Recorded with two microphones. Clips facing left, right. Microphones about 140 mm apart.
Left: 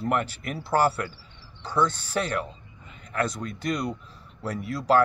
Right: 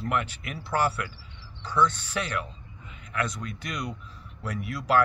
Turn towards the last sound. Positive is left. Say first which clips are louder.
# left 2 dB
turn(degrees=30)  # may be behind; listen again after turning